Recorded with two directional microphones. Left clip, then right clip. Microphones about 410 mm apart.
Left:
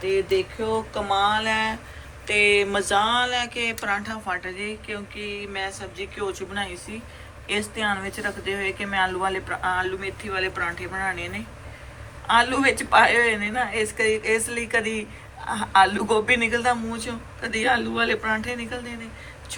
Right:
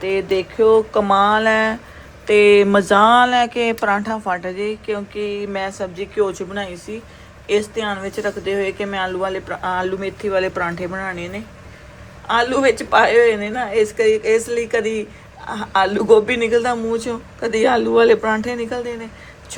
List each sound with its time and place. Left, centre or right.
0.0 s speech: right
12.3 s speech: centre